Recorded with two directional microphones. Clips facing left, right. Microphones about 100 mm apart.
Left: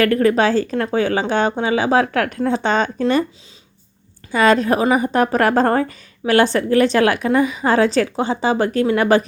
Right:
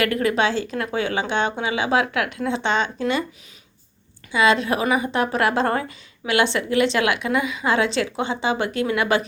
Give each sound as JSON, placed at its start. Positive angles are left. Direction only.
{"t": 0.0, "sound": "a woman's voice", "side_deg": 35}
{"t": 4.3, "sound": "a woman's voice", "side_deg": 45}